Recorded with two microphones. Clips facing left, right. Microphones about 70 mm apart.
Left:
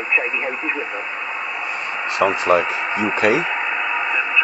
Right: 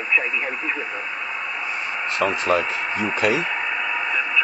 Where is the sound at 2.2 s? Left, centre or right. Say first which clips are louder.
Left 4 dB; left.